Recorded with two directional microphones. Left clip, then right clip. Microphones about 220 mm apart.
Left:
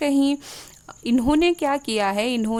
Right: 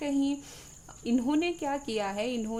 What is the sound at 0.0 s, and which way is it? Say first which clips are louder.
A woman's voice: left 9 dB; 45° left (ahead or behind).